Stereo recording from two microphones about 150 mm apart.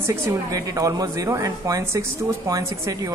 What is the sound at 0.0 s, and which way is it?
A woman's voice, 20° right (ahead or behind).